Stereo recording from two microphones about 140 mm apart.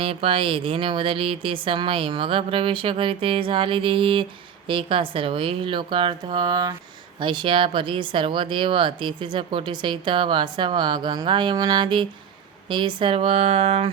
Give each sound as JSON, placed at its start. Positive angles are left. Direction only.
{"t": 0.0, "sound": "speech", "side_deg": -40}